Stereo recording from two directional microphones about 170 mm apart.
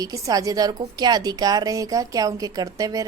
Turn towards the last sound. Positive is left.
turn(degrees=-20)  # may be behind; listen again after turning